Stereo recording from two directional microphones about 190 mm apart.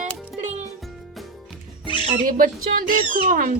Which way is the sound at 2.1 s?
45° right (ahead or behind).